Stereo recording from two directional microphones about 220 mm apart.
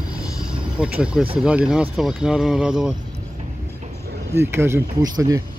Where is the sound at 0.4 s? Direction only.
5° right (ahead or behind).